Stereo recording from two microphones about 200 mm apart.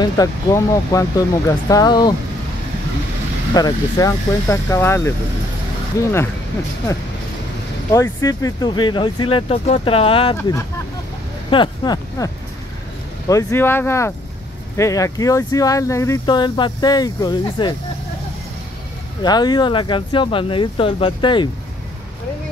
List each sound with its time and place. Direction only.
0.0 s speech: 15° left (ahead or behind)
3.5 s speech: 20° left (ahead or behind)
7.9 s speech: 15° left (ahead or behind)
11.5 s speech: 20° left (ahead or behind)
13.3 s speech: 15° left (ahead or behind)
19.2 s speech: 20° left (ahead or behind)